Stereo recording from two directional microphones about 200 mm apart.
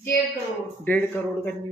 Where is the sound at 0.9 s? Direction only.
10° left (ahead or behind).